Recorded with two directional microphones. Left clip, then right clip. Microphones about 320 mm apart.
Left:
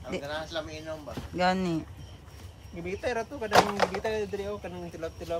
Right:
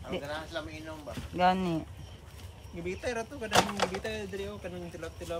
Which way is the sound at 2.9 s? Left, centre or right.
Left.